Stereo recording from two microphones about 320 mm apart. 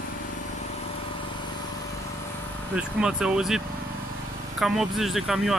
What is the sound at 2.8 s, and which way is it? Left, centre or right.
Speech, centre.